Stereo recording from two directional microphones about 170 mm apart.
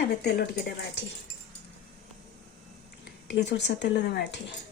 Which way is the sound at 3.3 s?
90° left.